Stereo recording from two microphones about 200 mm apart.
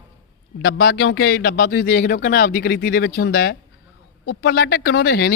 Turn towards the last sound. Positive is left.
turn(degrees=50)  # may be behind; listen again after turning